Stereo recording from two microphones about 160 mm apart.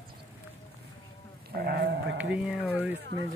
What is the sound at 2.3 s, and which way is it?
Speech, 5° right (ahead or behind).